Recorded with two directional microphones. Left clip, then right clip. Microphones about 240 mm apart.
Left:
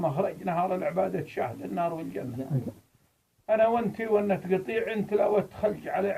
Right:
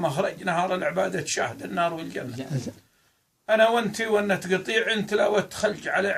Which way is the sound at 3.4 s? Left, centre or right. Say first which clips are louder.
Right 4 dB; right.